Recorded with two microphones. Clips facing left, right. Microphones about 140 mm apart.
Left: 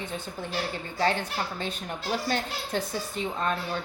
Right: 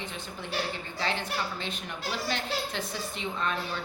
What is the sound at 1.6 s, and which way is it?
A woman's voice, 45° left (ahead or behind).